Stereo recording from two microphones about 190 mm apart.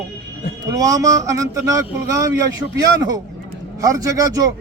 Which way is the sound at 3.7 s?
20° right (ahead or behind).